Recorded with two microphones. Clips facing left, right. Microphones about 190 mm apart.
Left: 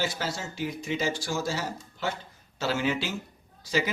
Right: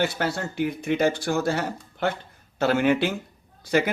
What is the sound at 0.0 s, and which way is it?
Speech, 60° right (ahead or behind).